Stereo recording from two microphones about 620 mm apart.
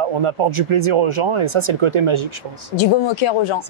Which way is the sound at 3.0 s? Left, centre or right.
Left.